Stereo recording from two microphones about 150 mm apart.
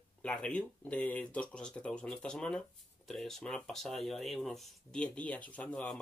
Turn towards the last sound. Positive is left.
turn(degrees=5)  # may be behind; listen again after turning